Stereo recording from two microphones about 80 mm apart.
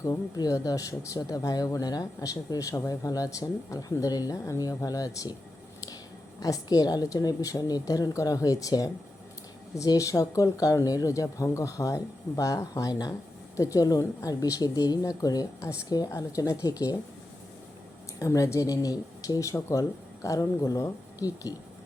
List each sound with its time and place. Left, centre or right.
0.0 s speech: left
6.4 s speech: left
12.9 s speech: left
13.6 s speech: left
16.0 s speech: left
18.2 s speech: left